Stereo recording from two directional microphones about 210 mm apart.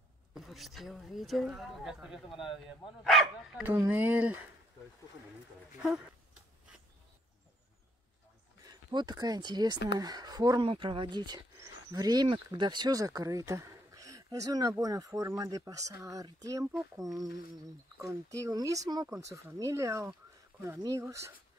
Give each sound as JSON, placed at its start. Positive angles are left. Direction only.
{"t": 0.3, "sound": "speech", "side_deg": 0}
{"t": 8.6, "sound": "speech", "side_deg": -20}